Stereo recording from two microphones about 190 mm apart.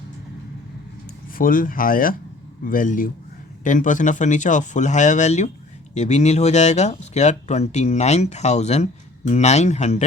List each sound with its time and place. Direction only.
1.4 s speech: 45° left (ahead or behind)